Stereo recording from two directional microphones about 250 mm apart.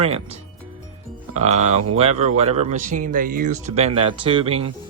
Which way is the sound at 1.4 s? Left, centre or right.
Right.